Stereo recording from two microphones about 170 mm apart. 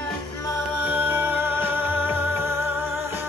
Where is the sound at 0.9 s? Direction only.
10° right (ahead or behind).